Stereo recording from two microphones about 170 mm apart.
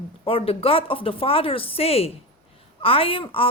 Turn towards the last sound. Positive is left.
turn(degrees=30)  # may be behind; listen again after turning